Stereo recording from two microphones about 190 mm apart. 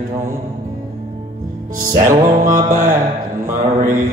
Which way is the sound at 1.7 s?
45° right (ahead or behind).